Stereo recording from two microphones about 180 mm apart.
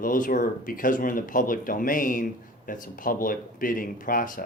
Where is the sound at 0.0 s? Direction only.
50° left (ahead or behind).